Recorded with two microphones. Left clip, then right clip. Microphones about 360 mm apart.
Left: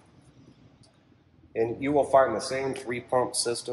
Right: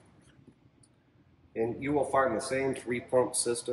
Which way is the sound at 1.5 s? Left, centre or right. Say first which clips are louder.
Left 5 dB; centre.